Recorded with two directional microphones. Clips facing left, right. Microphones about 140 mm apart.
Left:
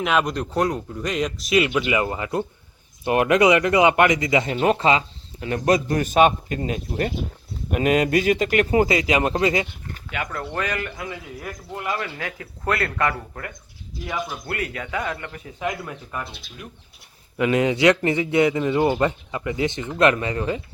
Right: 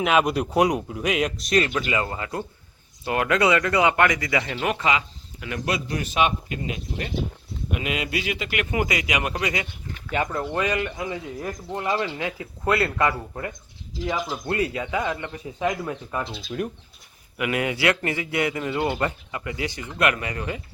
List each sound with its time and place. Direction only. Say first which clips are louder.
0.0 s speech: right 1 dB; 5° right (ahead or behind); by 5.5 s 30° left (ahead or behind)
5.5 s a man's voice: left 7 dB; 45° left (ahead or behind); by 9.6 s 30° left (ahead or behind)
10.1 s speech: right 4 dB; 25° right (ahead or behind)
16.6 s speech: right 12 dB; 50° right (ahead or behind)
17.3 s speech: left 6 dB; 25° left (ahead or behind)